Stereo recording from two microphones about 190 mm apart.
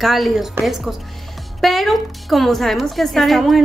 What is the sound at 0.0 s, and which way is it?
A woman's voice, centre (ahead or behind).